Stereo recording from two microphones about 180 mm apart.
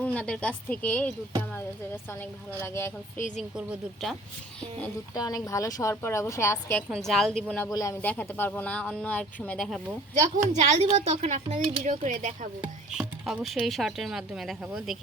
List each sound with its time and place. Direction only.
0.0 s speech: 5° left (ahead or behind)
3.3 s speech: 5° right (ahead or behind)
5.1 s speech: 20° left (ahead or behind)
6.9 s speech: centre (ahead or behind)
7.7 s speech: 20° left (ahead or behind); by 10.0 s centre (ahead or behind)
10.2 s speech: 40° right (ahead or behind)
12.9 s speech: 5° right (ahead or behind)